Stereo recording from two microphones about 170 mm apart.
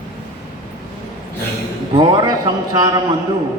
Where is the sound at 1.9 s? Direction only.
25° right (ahead or behind).